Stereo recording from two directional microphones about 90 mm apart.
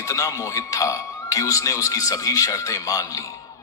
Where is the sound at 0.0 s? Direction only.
35° left (ahead or behind).